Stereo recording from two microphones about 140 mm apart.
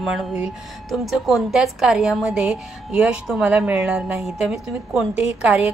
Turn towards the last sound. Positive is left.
turn(degrees=-10)  # may be behind; listen again after turning